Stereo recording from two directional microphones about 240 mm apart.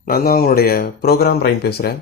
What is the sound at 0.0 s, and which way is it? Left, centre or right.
Speech, left.